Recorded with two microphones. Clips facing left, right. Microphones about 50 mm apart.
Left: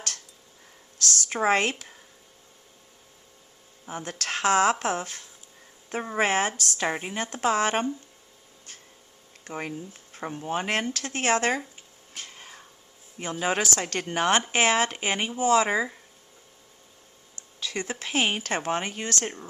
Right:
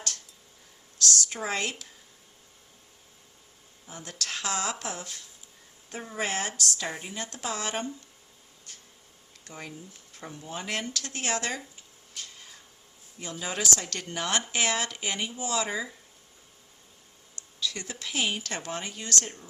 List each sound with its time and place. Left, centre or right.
1.0 s a woman's voice: left
3.8 s speech: left
9.4 s speech: left
12.1 s a sound: left
13.1 s speech: left
17.6 s speech: left